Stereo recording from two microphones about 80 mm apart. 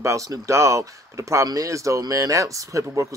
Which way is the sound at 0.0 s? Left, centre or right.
Right.